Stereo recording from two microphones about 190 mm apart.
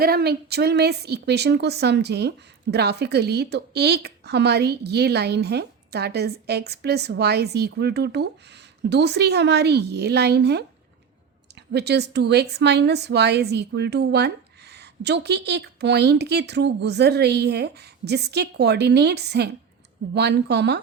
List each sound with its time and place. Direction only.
0.0 s a woman's voice: 55° right (ahead or behind)
11.7 s a woman's voice: 60° right (ahead or behind)